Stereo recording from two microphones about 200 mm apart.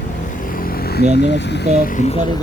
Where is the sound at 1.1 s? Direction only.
60° left (ahead or behind); by 2.2 s 35° left (ahead or behind).